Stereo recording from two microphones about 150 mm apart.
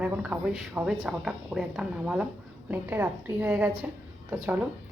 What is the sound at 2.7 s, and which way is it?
A woman's voice, 15° right (ahead or behind).